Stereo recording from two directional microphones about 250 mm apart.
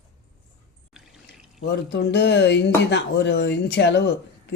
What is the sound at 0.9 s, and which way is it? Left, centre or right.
Water, centre.